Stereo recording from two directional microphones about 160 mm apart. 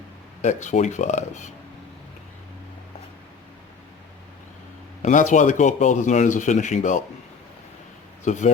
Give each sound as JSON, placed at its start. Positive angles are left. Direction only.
{"t": 0.4, "sound": "speech", "side_deg": 50}
{"t": 5.0, "sound": "speech", "side_deg": 50}
{"t": 8.2, "sound": "speech", "side_deg": 50}